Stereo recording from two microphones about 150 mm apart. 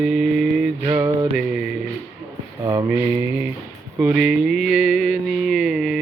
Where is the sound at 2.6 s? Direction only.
15° right (ahead or behind).